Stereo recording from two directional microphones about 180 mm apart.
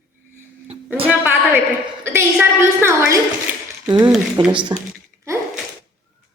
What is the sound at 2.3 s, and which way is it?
A woman's voice, 15° right (ahead or behind).